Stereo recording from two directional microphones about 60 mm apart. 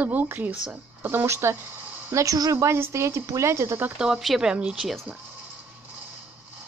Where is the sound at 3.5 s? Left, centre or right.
Right.